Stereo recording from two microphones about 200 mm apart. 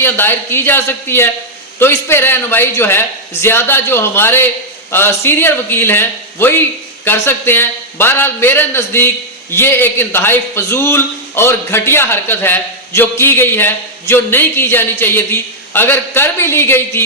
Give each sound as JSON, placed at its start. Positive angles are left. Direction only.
{"t": 0.0, "sound": "a man's voice", "side_deg": 10}